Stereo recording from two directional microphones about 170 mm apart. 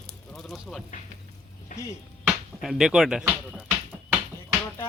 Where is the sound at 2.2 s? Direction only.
Centre (ahead or behind).